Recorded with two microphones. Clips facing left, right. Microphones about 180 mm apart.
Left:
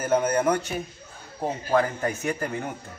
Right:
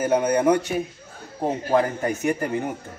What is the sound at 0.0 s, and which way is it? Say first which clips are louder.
A man's voice: right 3 dB; 15° right (ahead or behind).